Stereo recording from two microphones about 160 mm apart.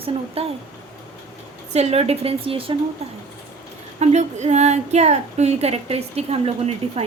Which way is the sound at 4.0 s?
45° right (ahead or behind).